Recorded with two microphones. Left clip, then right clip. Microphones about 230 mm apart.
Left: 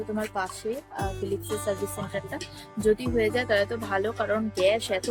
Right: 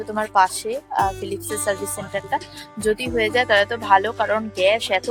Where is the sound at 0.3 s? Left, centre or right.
Centre.